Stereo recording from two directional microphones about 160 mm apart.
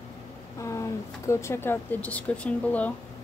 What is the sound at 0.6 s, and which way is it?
Speech, 20° left (ahead or behind).